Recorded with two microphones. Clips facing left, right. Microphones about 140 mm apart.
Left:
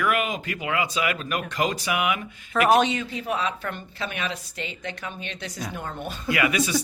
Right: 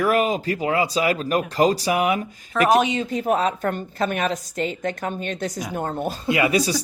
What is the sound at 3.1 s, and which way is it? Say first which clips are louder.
Speech: right 7 dB; 45° right (ahead or behind).